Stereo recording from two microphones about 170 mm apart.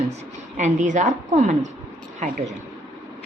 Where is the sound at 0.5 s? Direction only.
45° right (ahead or behind).